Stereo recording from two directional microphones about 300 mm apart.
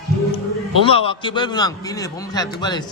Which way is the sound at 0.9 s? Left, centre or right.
Centre.